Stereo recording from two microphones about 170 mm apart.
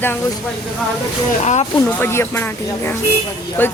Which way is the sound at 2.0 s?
15° left (ahead or behind).